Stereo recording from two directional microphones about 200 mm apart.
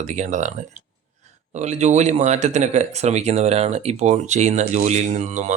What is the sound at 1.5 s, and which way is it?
Speech, 35° right (ahead or behind).